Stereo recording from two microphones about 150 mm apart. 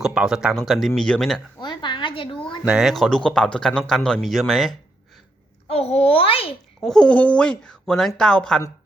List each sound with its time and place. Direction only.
0.0 s speech: 5° right (ahead or behind)
1.6 s a woman's voice: 30° left (ahead or behind)
2.6 s speech: 5° right (ahead or behind)
5.6 s a child's voice: 40° left (ahead or behind)
6.8 s speech: 5° left (ahead or behind)